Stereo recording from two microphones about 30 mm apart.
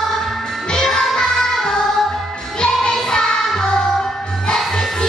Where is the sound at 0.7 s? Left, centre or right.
Left.